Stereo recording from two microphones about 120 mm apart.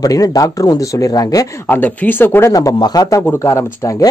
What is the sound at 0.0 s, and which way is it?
Speech, 30° left (ahead or behind).